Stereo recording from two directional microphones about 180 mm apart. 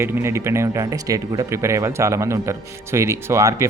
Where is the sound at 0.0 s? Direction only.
15° right (ahead or behind).